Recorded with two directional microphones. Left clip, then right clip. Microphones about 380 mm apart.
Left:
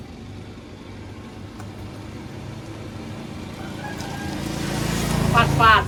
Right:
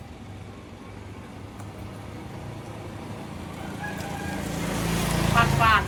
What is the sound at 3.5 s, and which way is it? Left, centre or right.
Chicken, centre.